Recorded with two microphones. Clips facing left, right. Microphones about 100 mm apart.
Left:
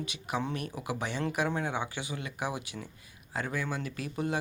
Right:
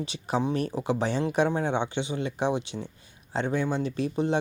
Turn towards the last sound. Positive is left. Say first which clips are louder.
# right 7 dB
turn(degrees=-25)  # may be behind; listen again after turning